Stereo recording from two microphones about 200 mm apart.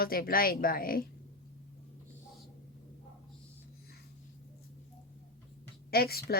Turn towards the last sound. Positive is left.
turn(degrees=50)  # may be behind; listen again after turning